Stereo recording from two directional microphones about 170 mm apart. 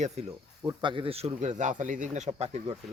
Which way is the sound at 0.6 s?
25° right (ahead or behind).